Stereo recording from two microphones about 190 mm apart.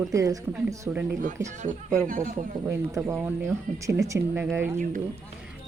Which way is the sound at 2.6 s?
15° right (ahead or behind).